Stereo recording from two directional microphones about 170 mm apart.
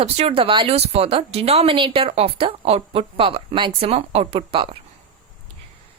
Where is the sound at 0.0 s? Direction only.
35° right (ahead or behind).